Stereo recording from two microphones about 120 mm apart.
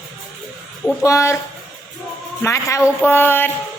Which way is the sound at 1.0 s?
25° left (ahead or behind).